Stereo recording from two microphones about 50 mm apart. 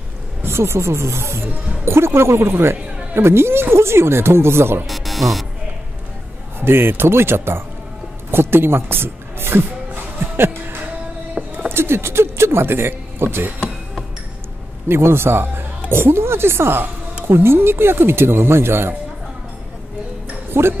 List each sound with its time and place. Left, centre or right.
0.4 s speech: right
4.8 s speech: centre
6.6 s speech: right
10.2 s music: right
11.4 s a sound: centre
11.7 s speech: right
14.9 s speech: right
20.5 s speech: right